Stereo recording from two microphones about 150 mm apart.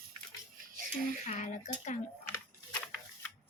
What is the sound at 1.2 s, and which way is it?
Speech, 55° left (ahead or behind).